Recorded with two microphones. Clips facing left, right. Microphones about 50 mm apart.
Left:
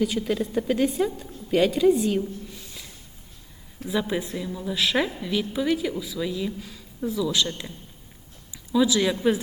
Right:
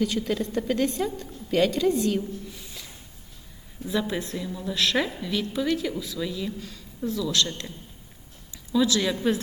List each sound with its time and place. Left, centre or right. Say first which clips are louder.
0.0 s a woman's voice: left 1 dB; centre
3.8 s a woman's voice: left 1 dB; centre